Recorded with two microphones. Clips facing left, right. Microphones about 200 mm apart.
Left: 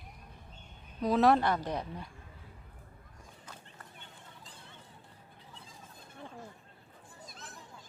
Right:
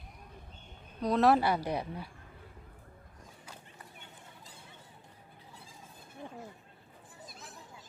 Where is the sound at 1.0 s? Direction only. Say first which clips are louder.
Even; centre (ahead or behind).